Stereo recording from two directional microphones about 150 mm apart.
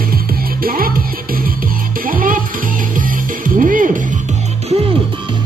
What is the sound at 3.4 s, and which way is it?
Music, 65° right (ahead or behind).